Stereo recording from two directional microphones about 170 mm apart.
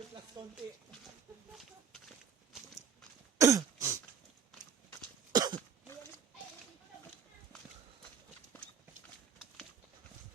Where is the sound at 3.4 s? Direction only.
20° right (ahead or behind).